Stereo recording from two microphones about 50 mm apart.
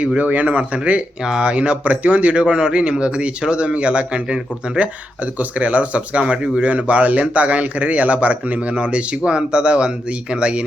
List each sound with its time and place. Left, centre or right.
0.2 s speech: right
2.3 s speech: centre